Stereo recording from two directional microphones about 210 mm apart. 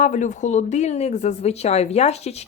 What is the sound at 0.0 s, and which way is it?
Speech, 35° left (ahead or behind).